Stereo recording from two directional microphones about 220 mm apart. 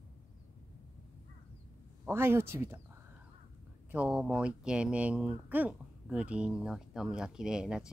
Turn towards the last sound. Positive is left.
turn(degrees=-5)  # may be behind; listen again after turning